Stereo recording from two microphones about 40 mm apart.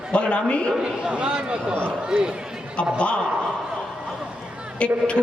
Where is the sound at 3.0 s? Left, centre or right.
Left.